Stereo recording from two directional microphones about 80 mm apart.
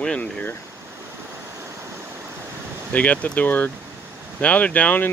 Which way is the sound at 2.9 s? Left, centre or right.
Centre.